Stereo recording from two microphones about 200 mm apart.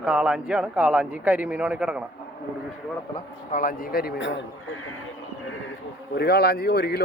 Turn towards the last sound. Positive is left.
turn(degrees=55)  # may be behind; listen again after turning